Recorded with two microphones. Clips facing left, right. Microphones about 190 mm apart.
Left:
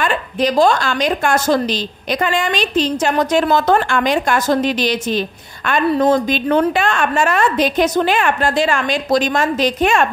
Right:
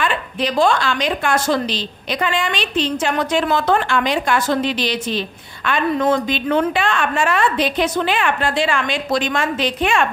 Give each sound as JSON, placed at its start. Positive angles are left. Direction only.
{"t": 0.0, "sound": "a woman's voice", "side_deg": 40}